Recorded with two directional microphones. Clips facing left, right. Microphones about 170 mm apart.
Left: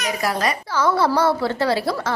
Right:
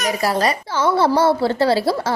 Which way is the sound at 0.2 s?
35° right (ahead or behind).